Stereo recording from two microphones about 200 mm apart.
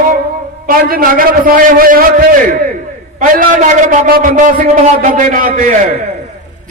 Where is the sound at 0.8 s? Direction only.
45° right (ahead or behind).